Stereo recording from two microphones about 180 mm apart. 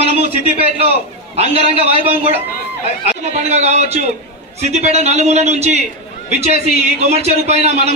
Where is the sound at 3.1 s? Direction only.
40° right (ahead or behind).